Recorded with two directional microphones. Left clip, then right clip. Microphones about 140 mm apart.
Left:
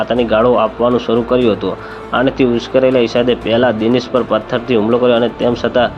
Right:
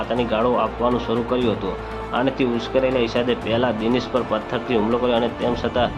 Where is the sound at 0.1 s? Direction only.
35° left (ahead or behind).